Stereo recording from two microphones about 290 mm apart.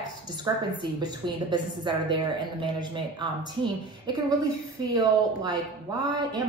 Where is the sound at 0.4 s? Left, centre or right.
Centre.